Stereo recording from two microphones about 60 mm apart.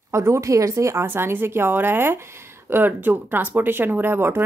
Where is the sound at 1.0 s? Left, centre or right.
Right.